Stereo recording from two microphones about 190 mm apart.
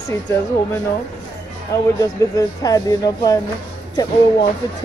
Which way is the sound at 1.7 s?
20° left (ahead or behind).